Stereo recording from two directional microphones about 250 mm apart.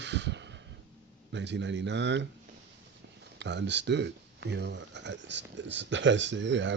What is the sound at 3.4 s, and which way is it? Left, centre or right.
Speech, right.